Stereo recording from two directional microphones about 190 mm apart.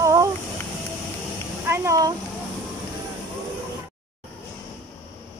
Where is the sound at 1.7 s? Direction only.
15° right (ahead or behind).